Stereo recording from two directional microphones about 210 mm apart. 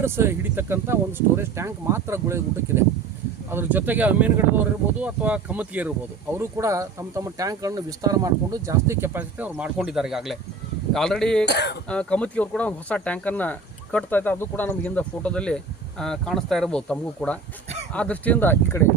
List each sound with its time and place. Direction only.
0.0 s speech: 10° right (ahead or behind)
11.4 s speech: 50° left (ahead or behind)
11.9 s speech: 5° left (ahead or behind)